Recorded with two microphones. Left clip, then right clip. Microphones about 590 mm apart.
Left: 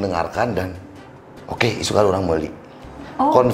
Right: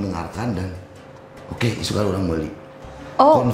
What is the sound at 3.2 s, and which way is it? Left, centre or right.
Speech, right.